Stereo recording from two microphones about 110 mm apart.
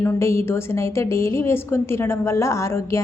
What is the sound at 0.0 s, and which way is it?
A woman's voice, 25° left (ahead or behind).